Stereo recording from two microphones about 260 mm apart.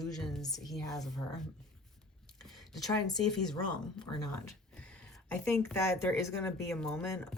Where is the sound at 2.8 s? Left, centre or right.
Centre.